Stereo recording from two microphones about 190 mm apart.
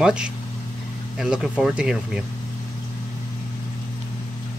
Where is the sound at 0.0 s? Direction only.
5° right (ahead or behind).